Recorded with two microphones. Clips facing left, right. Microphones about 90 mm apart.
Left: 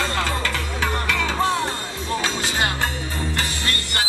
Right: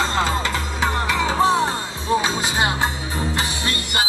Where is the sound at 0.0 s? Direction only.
20° right (ahead or behind).